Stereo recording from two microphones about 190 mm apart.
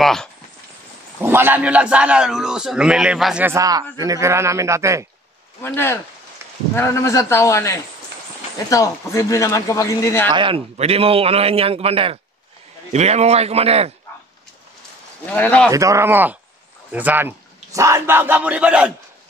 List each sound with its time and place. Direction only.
0.0 s clip-clop: centre (ahead or behind)
1.2 s a man's voice: 10° right (ahead or behind)
3.5 s speech: 20° right (ahead or behind)
5.6 s speech: 10° left (ahead or behind)
10.3 s a man's voice: 25° right (ahead or behind)
15.2 s speech: 10° left (ahead or behind)
15.7 s speech: 15° right (ahead or behind)